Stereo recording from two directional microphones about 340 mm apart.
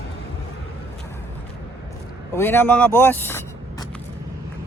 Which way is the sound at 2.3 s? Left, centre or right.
Centre.